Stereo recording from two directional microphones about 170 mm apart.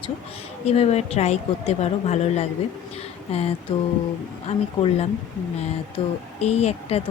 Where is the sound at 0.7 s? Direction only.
40° left (ahead or behind).